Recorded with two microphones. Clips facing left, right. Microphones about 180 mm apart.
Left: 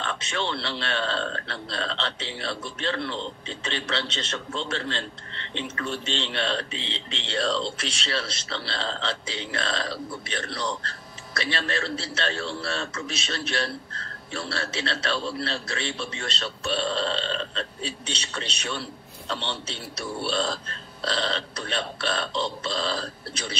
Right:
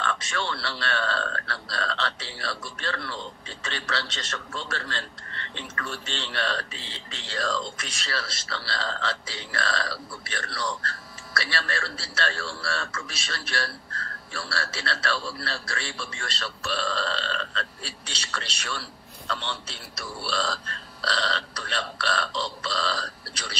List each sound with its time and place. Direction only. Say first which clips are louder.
0.0 s a man's voice: even; 25° left (ahead or behind)